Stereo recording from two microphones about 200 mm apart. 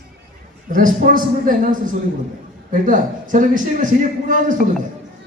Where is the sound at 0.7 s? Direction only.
40° right (ahead or behind).